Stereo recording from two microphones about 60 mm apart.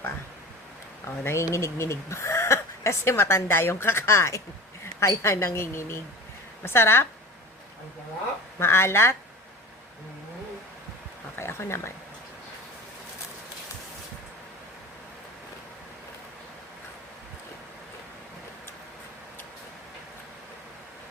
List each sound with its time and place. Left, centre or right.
1.0 s a woman's voice: left
8.5 s speech: left
11.3 s a sound: left